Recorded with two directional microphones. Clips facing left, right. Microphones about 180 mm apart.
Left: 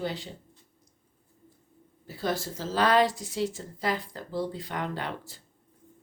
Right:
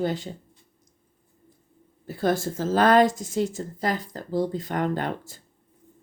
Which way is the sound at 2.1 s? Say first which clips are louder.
Right 6 dB; 50° right (ahead or behind).